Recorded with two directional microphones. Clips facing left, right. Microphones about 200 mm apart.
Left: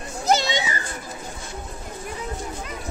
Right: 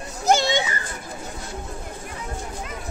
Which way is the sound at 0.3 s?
50° right (ahead or behind).